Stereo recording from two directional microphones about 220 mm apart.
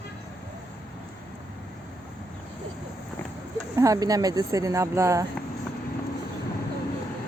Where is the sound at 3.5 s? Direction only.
15° right (ahead or behind).